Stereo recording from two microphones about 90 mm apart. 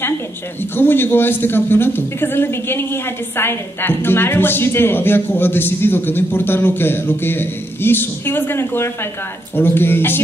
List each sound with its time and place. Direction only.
0.7 s a man's voice: 25° left (ahead or behind)